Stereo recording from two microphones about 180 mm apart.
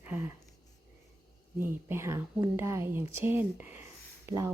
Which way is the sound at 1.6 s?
10° right (ahead or behind).